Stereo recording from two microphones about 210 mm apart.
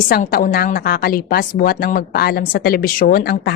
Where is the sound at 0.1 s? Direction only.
45° left (ahead or behind).